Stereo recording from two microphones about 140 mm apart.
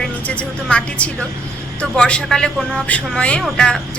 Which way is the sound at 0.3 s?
10° left (ahead or behind).